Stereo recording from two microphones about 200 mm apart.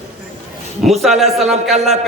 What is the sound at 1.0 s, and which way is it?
Speech, centre (ahead or behind).